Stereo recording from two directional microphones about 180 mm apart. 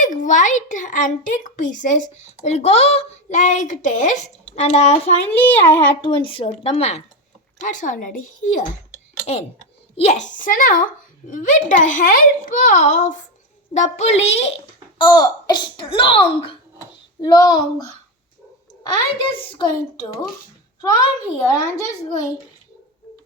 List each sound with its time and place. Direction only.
0.0 s a child's voice: 45° left (ahead or behind)
5.4 s a child's voice: 10° left (ahead or behind)
6.0 s a woman's voice: 25° left (ahead or behind)
7.6 s a child's voice: 45° left (ahead or behind)
10.0 s a child's voice: 40° left (ahead or behind); by 17.9 s 20° left (ahead or behind)
19.3 s a child's voice: 30° left (ahead or behind)